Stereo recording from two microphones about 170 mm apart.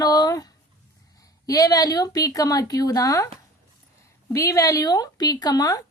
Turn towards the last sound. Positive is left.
turn(degrees=20)  # may be behind; listen again after turning